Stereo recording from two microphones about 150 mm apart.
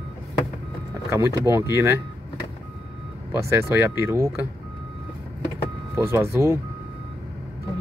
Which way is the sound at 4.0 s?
20° right (ahead or behind).